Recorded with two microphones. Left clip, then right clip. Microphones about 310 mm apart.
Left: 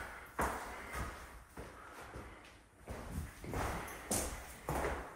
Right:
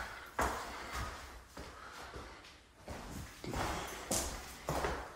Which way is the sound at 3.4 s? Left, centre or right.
Centre.